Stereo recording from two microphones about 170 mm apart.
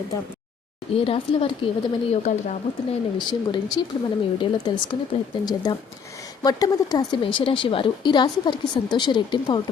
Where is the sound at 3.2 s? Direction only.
25° left (ahead or behind).